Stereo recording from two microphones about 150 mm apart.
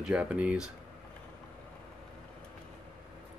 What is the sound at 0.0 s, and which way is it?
Speech, 5° right (ahead or behind).